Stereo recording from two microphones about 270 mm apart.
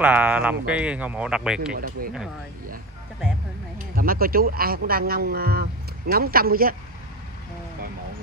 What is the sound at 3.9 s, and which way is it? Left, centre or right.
Speech, right.